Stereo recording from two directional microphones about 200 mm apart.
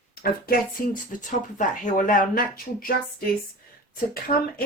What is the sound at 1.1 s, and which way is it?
Speech, 40° left (ahead or behind).